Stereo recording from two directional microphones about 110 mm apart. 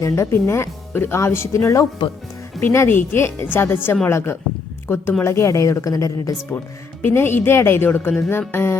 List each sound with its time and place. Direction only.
0.0 s speech: 25° left (ahead or behind)